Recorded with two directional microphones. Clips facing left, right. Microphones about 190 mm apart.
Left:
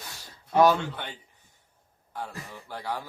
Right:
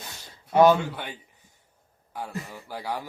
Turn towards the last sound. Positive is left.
turn(degrees=-10)  # may be behind; listen again after turning